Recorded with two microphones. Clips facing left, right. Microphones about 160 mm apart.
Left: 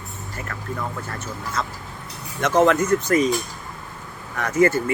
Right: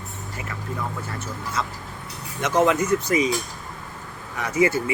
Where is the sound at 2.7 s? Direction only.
50° left (ahead or behind).